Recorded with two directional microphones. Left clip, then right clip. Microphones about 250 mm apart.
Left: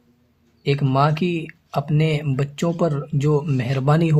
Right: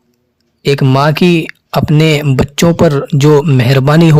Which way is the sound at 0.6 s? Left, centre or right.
Right.